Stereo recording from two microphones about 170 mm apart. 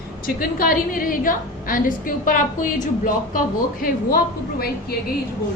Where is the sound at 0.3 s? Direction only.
60° left (ahead or behind).